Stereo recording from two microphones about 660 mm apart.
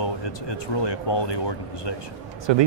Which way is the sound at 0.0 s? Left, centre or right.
Left.